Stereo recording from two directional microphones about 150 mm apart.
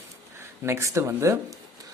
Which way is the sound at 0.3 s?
20° right (ahead or behind).